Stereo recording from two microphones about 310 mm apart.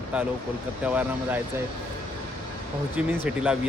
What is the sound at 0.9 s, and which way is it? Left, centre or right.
Speech, centre.